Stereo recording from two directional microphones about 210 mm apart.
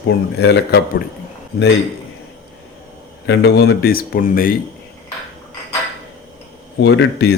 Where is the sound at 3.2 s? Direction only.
50° left (ahead or behind).